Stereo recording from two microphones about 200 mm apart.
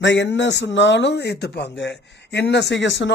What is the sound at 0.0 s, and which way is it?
A man's voice, 60° left (ahead or behind).